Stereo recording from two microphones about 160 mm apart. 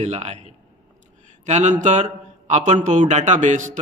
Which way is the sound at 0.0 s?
45° right (ahead or behind).